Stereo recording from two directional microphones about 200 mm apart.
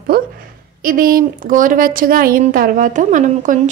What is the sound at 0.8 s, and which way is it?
A woman's voice, 45° right (ahead or behind).